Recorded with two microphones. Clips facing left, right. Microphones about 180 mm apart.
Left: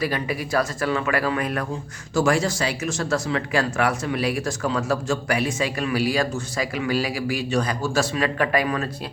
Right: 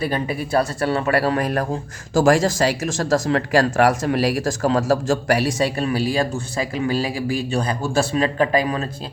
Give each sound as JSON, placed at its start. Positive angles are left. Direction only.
{"t": 0.0, "sound": "speech", "side_deg": -30}